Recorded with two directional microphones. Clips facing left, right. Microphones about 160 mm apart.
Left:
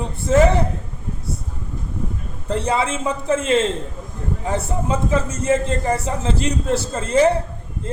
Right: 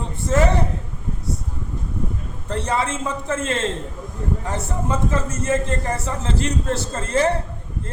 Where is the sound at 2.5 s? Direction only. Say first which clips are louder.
Left 3 dB; 15° left (ahead or behind).